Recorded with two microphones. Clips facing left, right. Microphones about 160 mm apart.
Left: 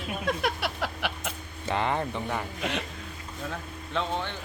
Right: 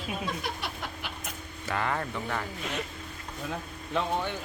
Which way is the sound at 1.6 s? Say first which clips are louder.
Left 3 dB; 20° left (ahead or behind).